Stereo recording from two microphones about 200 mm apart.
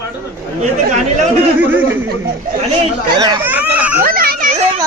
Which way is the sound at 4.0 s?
50° right (ahead or behind).